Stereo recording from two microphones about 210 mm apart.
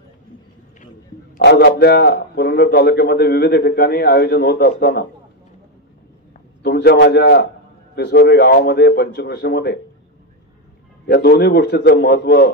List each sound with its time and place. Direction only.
1.4 s a man's voice: 50° left (ahead or behind)
6.6 s a man's voice: 50° left (ahead or behind)
11.1 s a man's voice: 50° left (ahead or behind)